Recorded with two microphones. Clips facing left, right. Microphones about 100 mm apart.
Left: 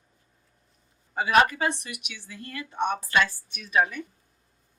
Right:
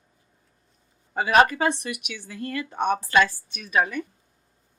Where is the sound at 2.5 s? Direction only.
75° right (ahead or behind).